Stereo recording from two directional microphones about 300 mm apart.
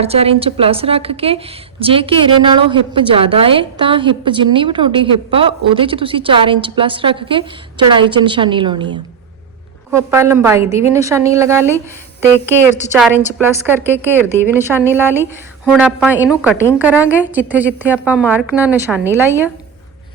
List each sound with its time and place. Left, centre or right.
0.0 s a woman's voice: centre
13.0 s a woman's voice: centre